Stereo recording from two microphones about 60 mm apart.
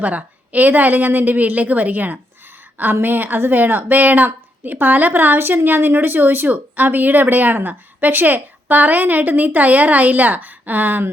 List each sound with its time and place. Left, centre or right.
0.0 s a woman's voice: right